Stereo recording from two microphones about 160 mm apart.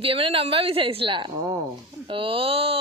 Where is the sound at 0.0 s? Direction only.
35° right (ahead or behind).